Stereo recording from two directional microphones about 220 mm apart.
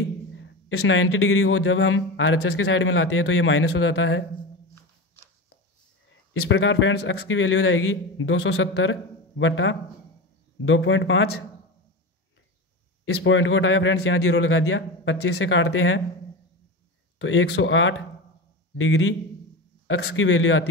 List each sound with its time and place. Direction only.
0.4 s a man's voice: 60° left (ahead or behind)
6.5 s a man's voice: 60° left (ahead or behind)
13.0 s a man's voice: 60° left (ahead or behind)
17.2 s a man's voice: 60° left (ahead or behind)